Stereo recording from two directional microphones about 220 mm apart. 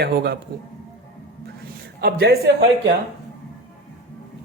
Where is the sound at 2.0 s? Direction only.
45° right (ahead or behind).